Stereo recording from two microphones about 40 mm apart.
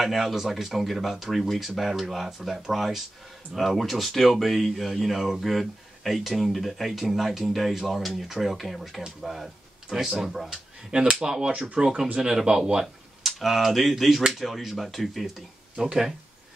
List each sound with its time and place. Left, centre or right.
0.0 s speech: centre
9.8 s speech: centre
10.9 s speech: centre